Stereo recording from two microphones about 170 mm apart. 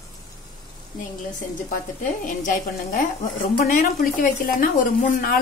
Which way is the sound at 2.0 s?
50° left (ahead or behind).